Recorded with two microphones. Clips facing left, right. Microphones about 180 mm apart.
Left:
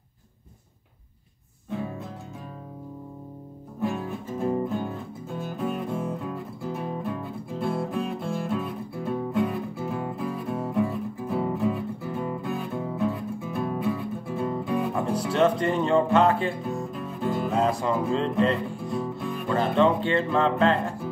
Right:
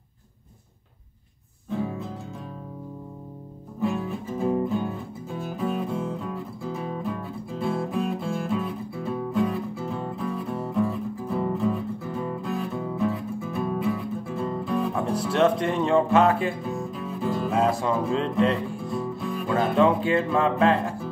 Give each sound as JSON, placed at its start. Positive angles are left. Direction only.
{"t": 4.4, "sound": "music", "side_deg": -5}